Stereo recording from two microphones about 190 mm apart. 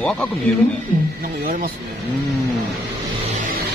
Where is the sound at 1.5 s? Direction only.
45° right (ahead or behind).